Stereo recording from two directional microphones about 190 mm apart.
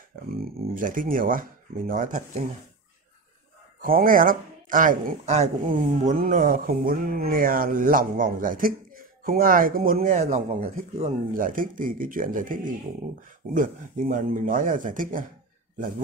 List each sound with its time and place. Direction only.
0.4 s speech: 50° right (ahead or behind)
3.8 s speech: 45° right (ahead or behind)